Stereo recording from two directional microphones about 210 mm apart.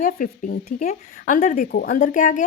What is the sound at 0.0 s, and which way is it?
A woman's voice, 40° left (ahead or behind).